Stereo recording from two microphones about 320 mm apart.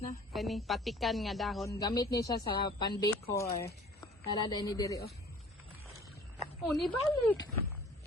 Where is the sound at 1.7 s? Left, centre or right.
Centre.